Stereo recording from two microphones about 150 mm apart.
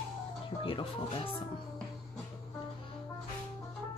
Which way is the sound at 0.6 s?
35° left (ahead or behind).